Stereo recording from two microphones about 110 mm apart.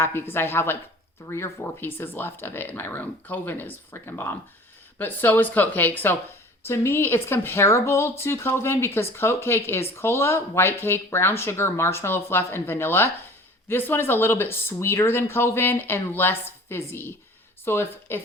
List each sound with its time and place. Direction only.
0.0 s speech: 20° left (ahead or behind)